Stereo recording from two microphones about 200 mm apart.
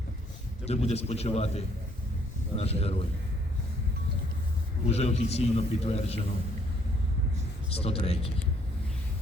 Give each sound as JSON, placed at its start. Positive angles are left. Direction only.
{"t": 0.6, "sound": "a man's voice", "side_deg": 30}
{"t": 4.9, "sound": "a man's voice", "side_deg": 30}
{"t": 7.7, "sound": "speech", "side_deg": 30}